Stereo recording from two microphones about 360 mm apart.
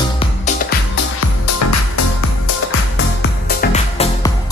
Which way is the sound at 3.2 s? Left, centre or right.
Left.